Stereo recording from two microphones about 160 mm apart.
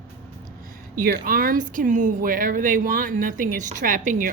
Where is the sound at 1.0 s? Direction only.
60° right (ahead or behind).